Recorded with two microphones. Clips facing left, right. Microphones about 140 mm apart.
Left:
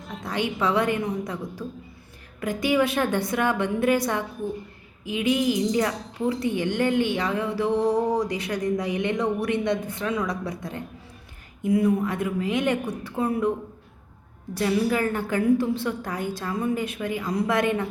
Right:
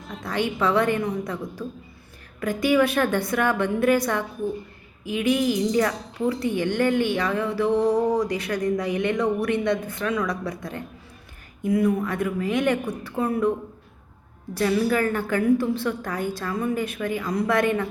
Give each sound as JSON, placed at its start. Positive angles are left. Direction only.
{"t": 0.3, "sound": "a woman's voice", "side_deg": 15}
{"t": 14.5, "sound": "a woman's voice", "side_deg": 20}